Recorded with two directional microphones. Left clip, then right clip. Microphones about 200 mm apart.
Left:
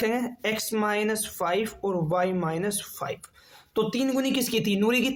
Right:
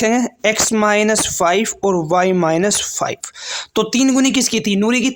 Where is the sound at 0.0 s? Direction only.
40° right (ahead or behind).